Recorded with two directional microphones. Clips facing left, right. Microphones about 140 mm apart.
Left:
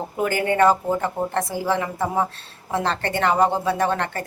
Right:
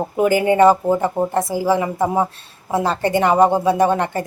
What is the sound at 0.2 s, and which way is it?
Speech, 10° right (ahead or behind).